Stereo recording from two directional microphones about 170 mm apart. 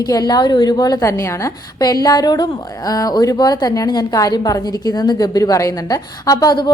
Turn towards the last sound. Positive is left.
turn(degrees=25)  # may be behind; listen again after turning